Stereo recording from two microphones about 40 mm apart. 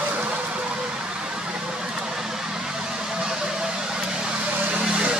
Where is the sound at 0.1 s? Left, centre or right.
Right.